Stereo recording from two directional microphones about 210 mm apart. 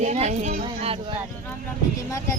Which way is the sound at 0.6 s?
30° right (ahead or behind).